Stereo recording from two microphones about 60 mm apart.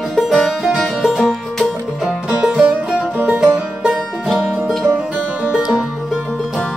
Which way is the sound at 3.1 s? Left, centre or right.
Right.